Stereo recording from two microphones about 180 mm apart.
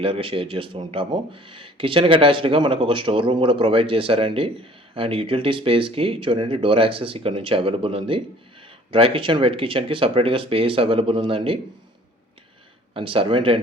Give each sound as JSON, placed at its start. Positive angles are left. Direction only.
{"t": 0.0, "sound": "speech", "side_deg": -30}
{"t": 12.9, "sound": "speech", "side_deg": -30}